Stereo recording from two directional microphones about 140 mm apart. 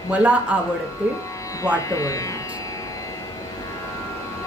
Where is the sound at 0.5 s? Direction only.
10° right (ahead or behind).